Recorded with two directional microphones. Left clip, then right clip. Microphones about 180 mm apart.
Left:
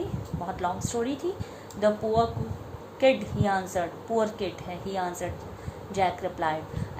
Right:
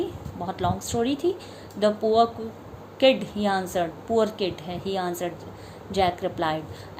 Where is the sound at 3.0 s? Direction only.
55° right (ahead or behind).